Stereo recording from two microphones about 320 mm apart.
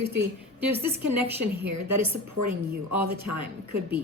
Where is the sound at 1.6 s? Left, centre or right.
Right.